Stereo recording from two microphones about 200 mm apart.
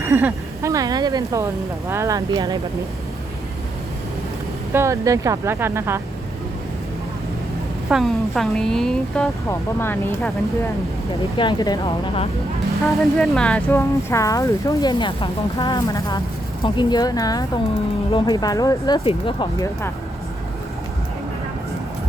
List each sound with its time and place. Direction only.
0.0 s speech: 10° right (ahead or behind)
4.7 s speech: 15° right (ahead or behind)
7.9 s speech: centre (ahead or behind)
11.3 s speech: 20° left (ahead or behind)
12.9 s speech: centre (ahead or behind); by 19.7 s 25° left (ahead or behind)